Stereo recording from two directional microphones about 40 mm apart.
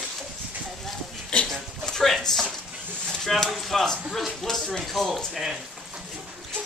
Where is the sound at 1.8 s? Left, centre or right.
Centre.